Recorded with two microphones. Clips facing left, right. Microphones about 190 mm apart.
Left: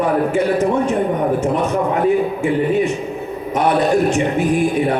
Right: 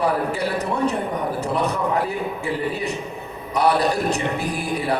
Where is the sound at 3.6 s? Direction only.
35° right (ahead or behind).